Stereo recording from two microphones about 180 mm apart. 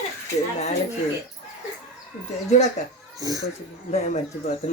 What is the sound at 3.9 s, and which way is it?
Speech, 40° left (ahead or behind).